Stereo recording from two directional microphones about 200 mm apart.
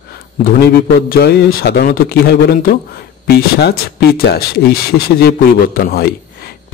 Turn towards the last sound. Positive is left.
turn(degrees=50)  # may be behind; listen again after turning